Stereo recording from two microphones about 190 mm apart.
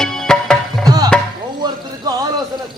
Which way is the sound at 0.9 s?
20° right (ahead or behind).